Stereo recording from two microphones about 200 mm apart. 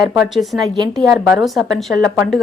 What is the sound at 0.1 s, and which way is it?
Speech, centre (ahead or behind).